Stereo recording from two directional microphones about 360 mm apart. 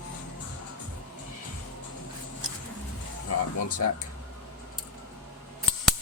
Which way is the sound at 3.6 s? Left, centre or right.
Left.